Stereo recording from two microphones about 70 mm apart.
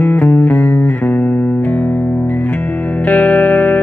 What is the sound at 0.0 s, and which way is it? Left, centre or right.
Music, left.